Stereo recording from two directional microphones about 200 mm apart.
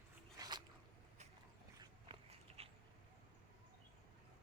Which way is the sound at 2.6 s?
30° right (ahead or behind).